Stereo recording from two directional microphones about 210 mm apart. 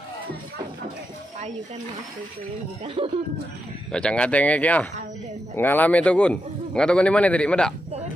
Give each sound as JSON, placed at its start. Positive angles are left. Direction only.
{"t": 2.8, "sound": "speech", "side_deg": -25}
{"t": 3.9, "sound": "a man's voice", "side_deg": 5}